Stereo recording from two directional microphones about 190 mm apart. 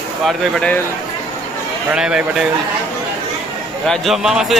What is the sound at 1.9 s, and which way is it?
Speech, 5° right (ahead or behind).